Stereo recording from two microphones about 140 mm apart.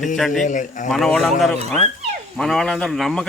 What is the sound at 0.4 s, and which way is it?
Speech, 65° left (ahead or behind).